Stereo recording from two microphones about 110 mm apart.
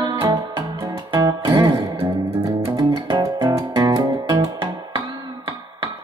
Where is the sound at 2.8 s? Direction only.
40° right (ahead or behind).